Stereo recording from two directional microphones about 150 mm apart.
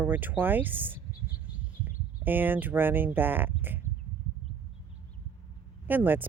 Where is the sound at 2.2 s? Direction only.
10° right (ahead or behind).